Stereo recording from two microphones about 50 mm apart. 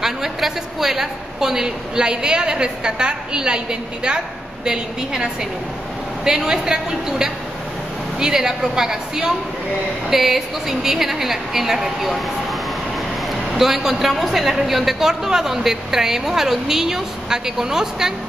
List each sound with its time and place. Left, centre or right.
0.0 s a man's voice: centre